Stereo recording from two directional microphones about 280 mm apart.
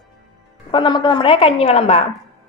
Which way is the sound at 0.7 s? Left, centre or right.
Centre.